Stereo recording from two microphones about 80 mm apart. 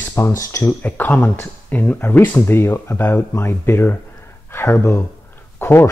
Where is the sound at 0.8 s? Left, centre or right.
Left.